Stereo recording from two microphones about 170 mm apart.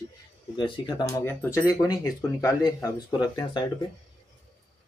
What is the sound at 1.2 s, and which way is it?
A man's voice, 15° left (ahead or behind).